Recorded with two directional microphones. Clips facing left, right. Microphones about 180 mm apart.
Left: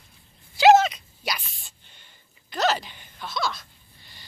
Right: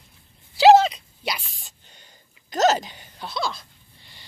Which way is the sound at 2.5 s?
40° right (ahead or behind).